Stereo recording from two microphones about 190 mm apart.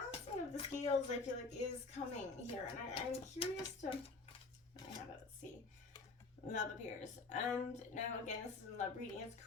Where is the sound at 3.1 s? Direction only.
30° left (ahead or behind).